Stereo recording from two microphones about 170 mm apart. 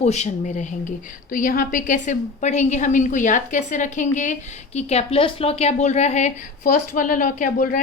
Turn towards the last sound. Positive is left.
turn(degrees=50)  # may be behind; listen again after turning